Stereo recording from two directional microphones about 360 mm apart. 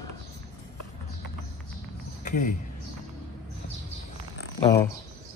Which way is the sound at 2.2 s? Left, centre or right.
Left.